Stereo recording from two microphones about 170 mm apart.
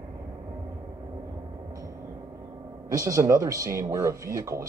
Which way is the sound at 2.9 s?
20° right (ahead or behind).